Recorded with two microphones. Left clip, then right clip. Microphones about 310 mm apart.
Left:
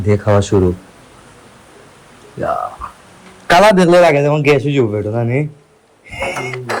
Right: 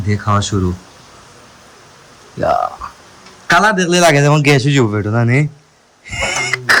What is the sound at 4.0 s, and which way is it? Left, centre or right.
Speech, centre.